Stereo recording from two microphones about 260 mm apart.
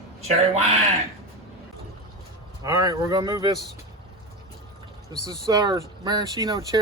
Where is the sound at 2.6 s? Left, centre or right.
Centre.